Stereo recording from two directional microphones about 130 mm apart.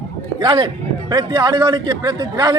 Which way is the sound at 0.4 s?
35° right (ahead or behind).